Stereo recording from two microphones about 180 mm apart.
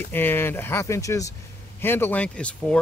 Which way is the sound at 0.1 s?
10° left (ahead or behind).